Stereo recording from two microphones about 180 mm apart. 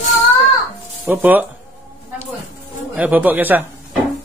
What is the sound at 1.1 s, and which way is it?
Speech, 10° right (ahead or behind).